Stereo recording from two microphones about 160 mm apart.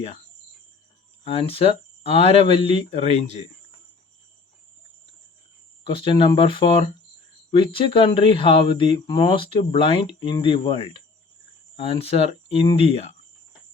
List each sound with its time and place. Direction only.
1.2 s speech: 35° left (ahead or behind)
5.8 s speech: 30° left (ahead or behind)